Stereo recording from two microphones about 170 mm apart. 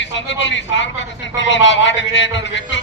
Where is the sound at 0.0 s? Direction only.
90° left.